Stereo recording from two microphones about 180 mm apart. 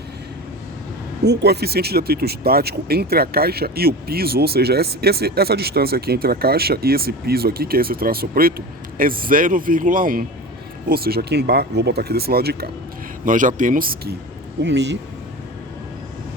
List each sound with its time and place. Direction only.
1.2 s speech: 65° right (ahead or behind)
13.2 s speech: 45° right (ahead or behind)
14.6 s speech: 75° right (ahead or behind)